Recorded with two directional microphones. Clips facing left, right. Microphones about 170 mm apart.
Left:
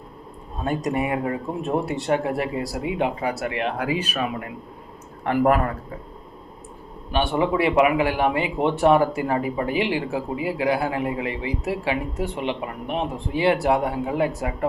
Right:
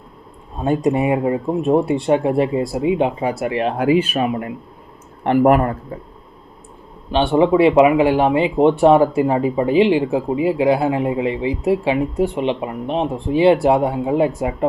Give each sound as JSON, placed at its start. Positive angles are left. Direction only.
{"t": 0.9, "sound": "speech", "side_deg": -20}
{"t": 7.1, "sound": "speech", "side_deg": -25}